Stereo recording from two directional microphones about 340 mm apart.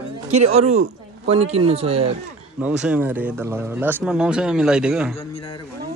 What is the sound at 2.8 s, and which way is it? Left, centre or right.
Speech, centre.